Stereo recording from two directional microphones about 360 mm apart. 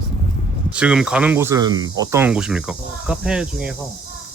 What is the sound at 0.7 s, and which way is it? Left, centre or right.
Speech, centre.